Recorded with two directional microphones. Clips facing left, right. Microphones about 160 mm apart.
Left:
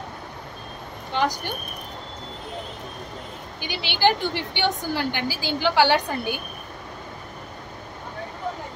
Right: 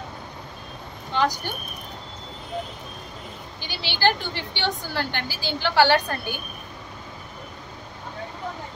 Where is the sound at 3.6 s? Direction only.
15° left (ahead or behind).